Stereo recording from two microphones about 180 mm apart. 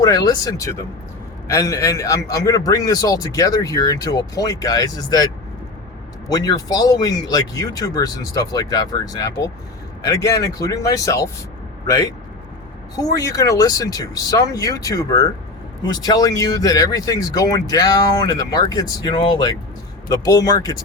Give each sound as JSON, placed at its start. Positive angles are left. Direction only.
{"t": 0.0, "sound": "a man's voice", "side_deg": 20}